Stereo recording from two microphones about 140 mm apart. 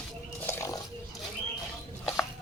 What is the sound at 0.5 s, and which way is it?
Roaring cats, 20° left (ahead or behind).